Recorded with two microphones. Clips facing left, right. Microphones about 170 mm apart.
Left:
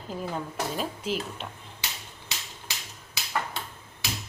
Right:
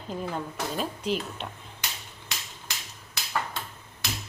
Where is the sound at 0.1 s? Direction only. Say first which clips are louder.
Right 1 dB; centre (ahead or behind).